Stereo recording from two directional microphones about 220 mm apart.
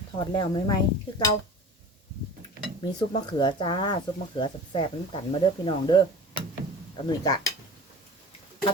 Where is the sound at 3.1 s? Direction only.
20° left (ahead or behind).